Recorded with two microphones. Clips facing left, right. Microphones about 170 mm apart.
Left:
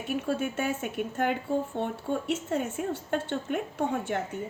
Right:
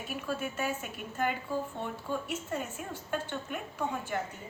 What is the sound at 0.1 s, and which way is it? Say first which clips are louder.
A woman's voice: left 7 dB; 55° left (ahead or behind).